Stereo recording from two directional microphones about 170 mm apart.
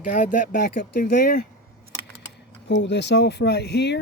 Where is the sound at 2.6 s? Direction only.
90° left.